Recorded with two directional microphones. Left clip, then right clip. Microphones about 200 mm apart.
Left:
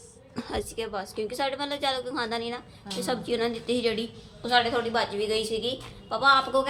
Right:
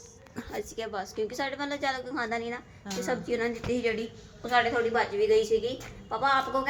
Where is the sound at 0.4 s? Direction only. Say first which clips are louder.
Left 5 dB; 15° left (ahead or behind).